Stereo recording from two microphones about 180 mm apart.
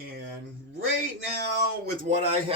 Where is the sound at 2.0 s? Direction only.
40° right (ahead or behind).